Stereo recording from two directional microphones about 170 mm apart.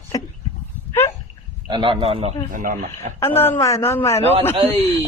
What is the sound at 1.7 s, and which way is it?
Speech, 30° right (ahead or behind).